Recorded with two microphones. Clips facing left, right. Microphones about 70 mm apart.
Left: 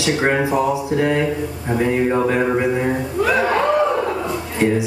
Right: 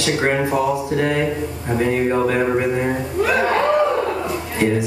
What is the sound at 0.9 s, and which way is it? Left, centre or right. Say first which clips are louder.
Speech: left 3 dB; centre.